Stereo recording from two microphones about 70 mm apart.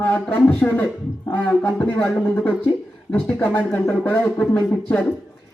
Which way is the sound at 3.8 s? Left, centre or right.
Left.